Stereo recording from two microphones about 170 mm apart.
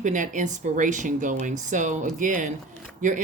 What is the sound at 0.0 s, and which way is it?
Speech, 45° right (ahead or behind).